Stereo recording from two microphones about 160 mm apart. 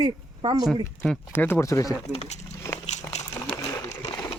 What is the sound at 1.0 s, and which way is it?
Speech, 10° left (ahead or behind).